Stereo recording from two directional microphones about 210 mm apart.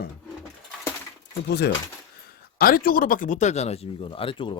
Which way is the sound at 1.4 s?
50° left (ahead or behind).